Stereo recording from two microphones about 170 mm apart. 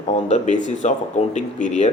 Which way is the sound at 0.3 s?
45° left (ahead or behind).